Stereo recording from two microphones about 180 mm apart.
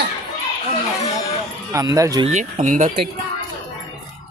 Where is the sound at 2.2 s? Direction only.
40° right (ahead or behind).